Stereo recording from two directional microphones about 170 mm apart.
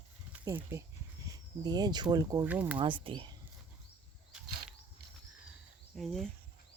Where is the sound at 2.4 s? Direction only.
10° right (ahead or behind).